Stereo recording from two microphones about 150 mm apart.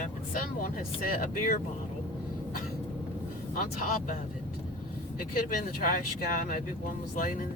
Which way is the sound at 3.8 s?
65° left (ahead or behind).